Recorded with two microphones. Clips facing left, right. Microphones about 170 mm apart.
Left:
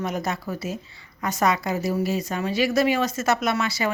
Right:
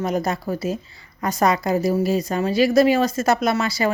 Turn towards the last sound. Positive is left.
turn(degrees=-35)  # may be behind; listen again after turning